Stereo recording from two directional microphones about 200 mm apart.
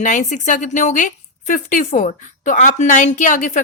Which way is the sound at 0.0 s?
40° left (ahead or behind).